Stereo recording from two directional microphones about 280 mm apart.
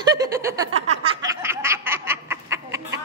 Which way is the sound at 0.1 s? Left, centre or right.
Centre.